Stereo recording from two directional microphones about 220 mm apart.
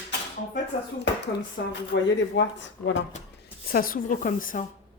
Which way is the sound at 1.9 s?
55° left (ahead or behind).